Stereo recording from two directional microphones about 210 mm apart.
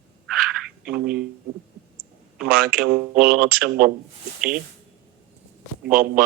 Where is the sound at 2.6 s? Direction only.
45° right (ahead or behind).